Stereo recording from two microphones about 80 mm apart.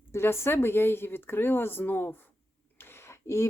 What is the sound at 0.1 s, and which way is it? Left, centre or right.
Speech, left.